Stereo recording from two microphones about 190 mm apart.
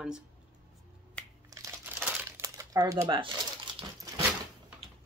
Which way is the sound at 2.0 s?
10° right (ahead or behind).